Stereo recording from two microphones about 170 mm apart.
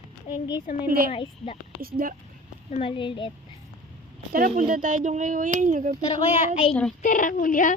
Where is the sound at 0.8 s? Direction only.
55° right (ahead or behind).